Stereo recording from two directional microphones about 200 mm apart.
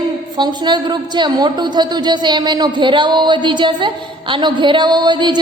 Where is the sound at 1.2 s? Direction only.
20° right (ahead or behind).